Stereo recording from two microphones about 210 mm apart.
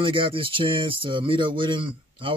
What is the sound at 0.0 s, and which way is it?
Speech, 25° right (ahead or behind).